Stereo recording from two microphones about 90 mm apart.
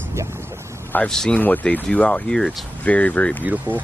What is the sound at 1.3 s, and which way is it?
Speech, 20° left (ahead or behind).